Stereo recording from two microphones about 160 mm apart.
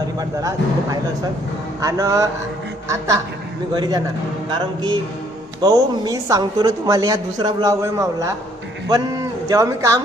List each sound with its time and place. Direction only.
0.2 s a woman's voice: 25° right (ahead or behind)
3.8 s a woman's voice: 25° right (ahead or behind)
5.6 s a woman's voice: 20° right (ahead or behind)